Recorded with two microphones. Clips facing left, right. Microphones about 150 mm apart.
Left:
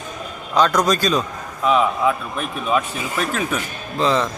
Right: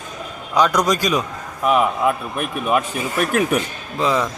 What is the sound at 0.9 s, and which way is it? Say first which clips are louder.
A man's voice: even; 15° right (ahead or behind).